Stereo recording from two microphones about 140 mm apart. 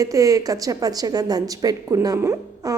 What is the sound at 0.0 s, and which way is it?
Speech, 25° right (ahead or behind).